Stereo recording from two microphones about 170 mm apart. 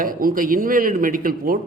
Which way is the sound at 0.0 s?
55° right (ahead or behind).